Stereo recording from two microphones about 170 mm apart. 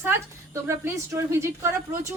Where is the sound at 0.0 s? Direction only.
15° right (ahead or behind).